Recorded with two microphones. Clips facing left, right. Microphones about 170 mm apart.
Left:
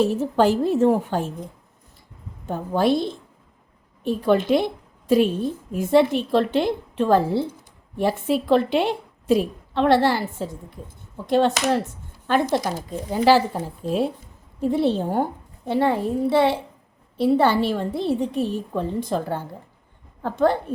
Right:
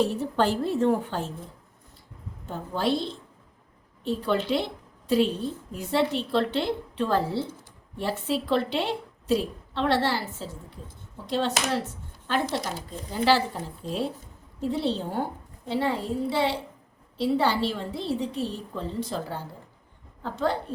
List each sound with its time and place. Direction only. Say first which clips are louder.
0.1 s a woman's voice: left 6 dB; 45° left (ahead or behind)
2.5 s a woman's voice: left 6 dB; 50° left (ahead or behind)
4.2 s a woman's voice: left 8 dB; 50° left (ahead or behind)